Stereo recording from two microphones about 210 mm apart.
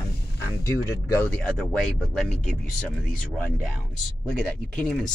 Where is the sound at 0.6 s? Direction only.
15° left (ahead or behind).